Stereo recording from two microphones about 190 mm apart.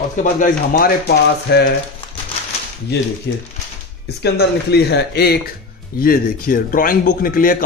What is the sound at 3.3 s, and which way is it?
Speech, 65° left (ahead or behind).